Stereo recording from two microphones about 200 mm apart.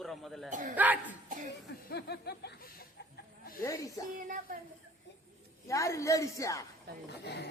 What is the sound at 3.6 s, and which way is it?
Speech, 15° left (ahead or behind).